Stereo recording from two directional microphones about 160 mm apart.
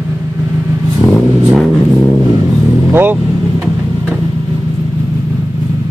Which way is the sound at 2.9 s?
15° right (ahead or behind).